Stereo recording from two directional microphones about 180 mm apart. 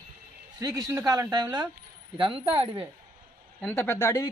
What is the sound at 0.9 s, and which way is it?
Speech, 15° right (ahead or behind).